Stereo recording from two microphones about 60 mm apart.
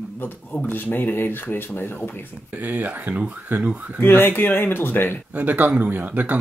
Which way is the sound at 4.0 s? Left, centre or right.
Left.